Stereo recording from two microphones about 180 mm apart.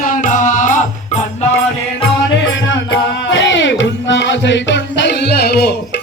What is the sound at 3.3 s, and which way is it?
Music, 90° left.